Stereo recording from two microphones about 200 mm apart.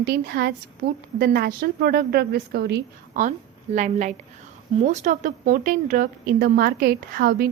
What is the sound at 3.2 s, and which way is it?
A woman's voice, 35° right (ahead or behind).